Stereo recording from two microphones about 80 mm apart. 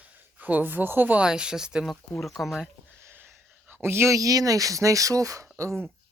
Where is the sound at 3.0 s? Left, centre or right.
Right.